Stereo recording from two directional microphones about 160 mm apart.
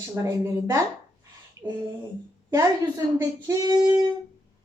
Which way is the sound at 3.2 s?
20° right (ahead or behind).